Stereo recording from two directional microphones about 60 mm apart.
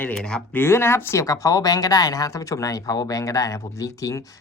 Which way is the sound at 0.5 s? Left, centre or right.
Left.